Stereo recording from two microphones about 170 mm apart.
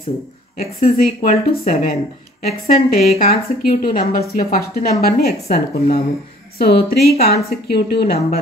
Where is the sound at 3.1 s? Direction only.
60° left (ahead or behind).